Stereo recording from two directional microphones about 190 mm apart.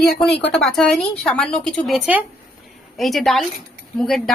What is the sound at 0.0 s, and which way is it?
Speech, 60° left (ahead or behind).